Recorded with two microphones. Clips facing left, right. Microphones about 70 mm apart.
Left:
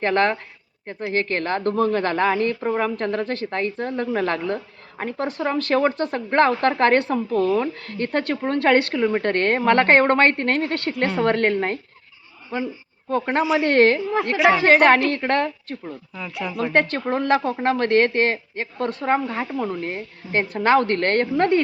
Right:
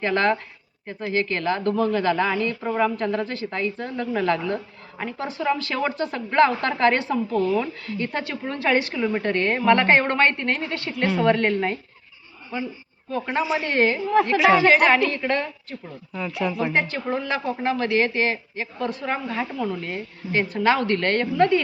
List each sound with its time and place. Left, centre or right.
0.0 s a woman's voice: left
13.3 s speech: left
14.3 s speech: centre
14.6 s a woman's voice: left
16.1 s speech: centre
16.7 s a woman's voice: left
19.5 s a woman's voice: left